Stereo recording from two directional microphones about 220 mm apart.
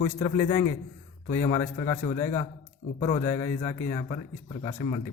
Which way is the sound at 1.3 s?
15° left (ahead or behind).